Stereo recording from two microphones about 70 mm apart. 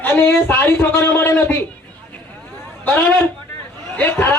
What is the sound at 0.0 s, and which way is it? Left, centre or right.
A man's voice, left.